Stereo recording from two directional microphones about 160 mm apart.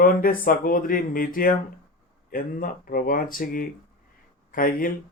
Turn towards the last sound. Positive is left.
turn(degrees=60)  # may be behind; listen again after turning